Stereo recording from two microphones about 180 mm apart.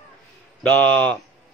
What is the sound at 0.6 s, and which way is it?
Speech, 5° left (ahead or behind).